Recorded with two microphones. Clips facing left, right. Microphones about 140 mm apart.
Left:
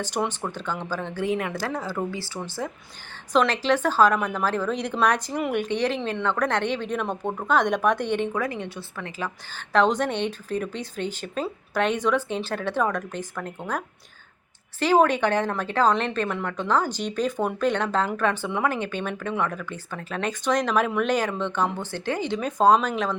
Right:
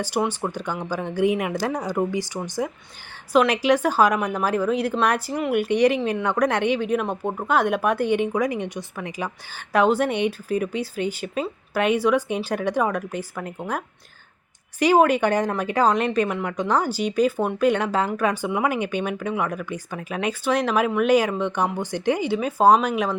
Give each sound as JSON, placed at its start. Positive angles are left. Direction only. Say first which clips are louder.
{"t": 0.0, "sound": "a woman's voice", "louder": "right 3 dB", "side_deg": -10}